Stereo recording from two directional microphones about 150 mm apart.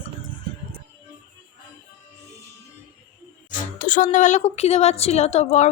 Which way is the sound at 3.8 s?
60° left (ahead or behind).